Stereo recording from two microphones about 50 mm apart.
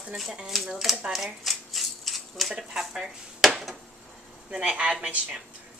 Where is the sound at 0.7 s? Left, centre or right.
Centre.